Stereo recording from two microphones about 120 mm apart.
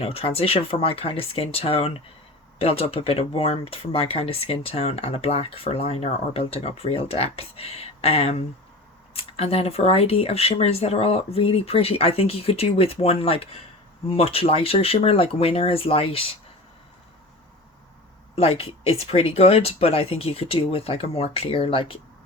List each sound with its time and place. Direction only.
0.0 s speech: 55° left (ahead or behind)
18.3 s speech: 55° left (ahead or behind)